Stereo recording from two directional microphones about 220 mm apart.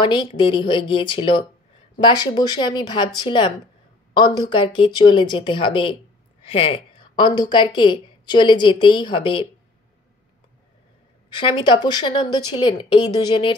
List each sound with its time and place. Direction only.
0.0 s a woman's voice: 20° left (ahead or behind)
11.3 s a woman's voice: 20° left (ahead or behind)